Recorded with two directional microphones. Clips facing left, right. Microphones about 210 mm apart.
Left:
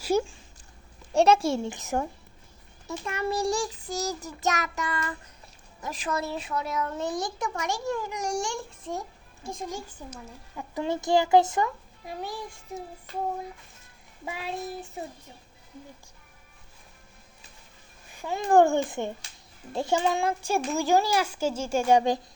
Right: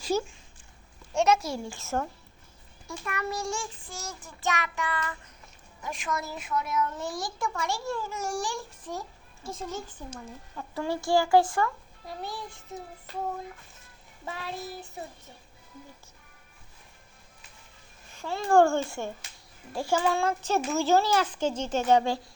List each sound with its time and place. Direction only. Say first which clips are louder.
0.0 s a sound: left 3 dB; 10° left (ahead or behind)
1.1 s a child's voice: left 4 dB; 30° left (ahead or behind); by 2.0 s 15° left (ahead or behind)
3.0 s child singing: left 5 dB; 25° left (ahead or behind); by 5.1 s 45° left (ahead or behind)
5.9 s a child's voice: left 3 dB; 35° left (ahead or behind); by 12.8 s 15° left (ahead or behind)
14.3 s a child's voice: left 2 dB; 15° left (ahead or behind)
18.1 s a child's voice: left 1 dB; 15° left (ahead or behind)